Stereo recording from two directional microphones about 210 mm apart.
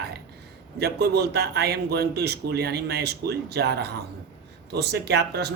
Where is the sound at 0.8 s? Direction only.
50° right (ahead or behind).